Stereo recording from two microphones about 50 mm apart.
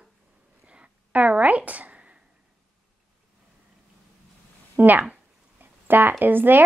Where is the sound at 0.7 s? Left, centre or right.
Right.